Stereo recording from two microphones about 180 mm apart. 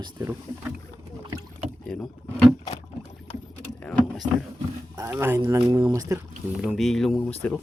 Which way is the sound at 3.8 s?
5° left (ahead or behind).